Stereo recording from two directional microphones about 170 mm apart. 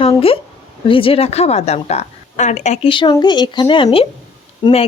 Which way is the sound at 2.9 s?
25° left (ahead or behind).